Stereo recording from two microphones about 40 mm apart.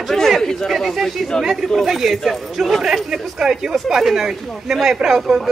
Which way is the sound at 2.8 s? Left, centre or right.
Centre.